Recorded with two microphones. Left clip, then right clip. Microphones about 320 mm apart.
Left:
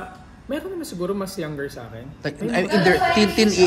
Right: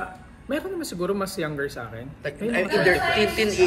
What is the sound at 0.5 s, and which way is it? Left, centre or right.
A man's voice, centre.